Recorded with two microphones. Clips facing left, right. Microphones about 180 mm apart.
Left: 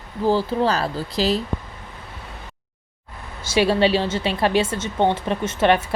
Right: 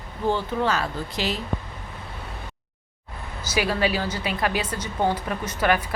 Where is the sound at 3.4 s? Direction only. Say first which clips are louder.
Left 6 dB; 25° left (ahead or behind).